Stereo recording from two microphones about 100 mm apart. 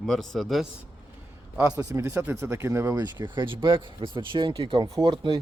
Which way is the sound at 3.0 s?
45° right (ahead or behind).